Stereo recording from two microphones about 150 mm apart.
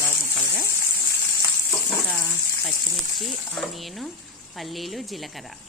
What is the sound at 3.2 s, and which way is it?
Speech, centre (ahead or behind).